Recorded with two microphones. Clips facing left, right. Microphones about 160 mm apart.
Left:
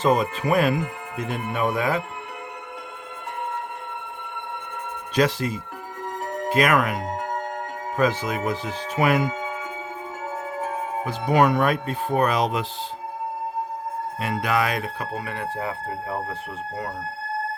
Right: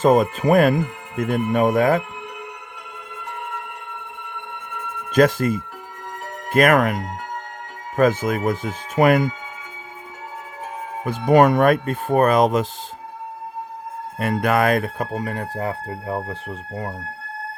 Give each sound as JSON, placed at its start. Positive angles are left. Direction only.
{"t": 0.0, "sound": "speech", "side_deg": -45}
{"t": 5.1, "sound": "speech", "side_deg": -50}
{"t": 11.0, "sound": "speech", "side_deg": -50}
{"t": 14.2, "sound": "speech", "side_deg": -50}